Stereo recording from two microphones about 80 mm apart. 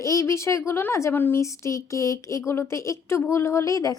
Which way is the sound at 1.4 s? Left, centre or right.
Left.